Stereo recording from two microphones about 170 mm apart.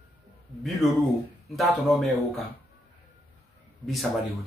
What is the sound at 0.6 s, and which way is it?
Speech, centre (ahead or behind).